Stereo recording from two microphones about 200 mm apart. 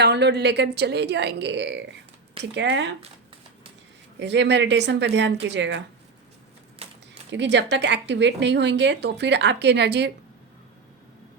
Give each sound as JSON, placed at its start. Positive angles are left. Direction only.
{"t": 0.0, "sound": "speech", "side_deg": -55}
{"t": 4.2, "sound": "speech", "side_deg": -60}
{"t": 6.8, "sound": "a sound", "side_deg": -30}
{"t": 7.3, "sound": "speech", "side_deg": -60}